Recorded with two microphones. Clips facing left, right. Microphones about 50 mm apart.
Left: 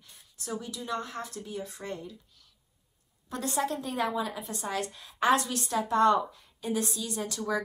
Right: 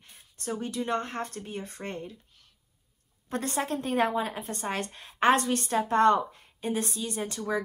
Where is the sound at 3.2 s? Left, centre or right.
Right.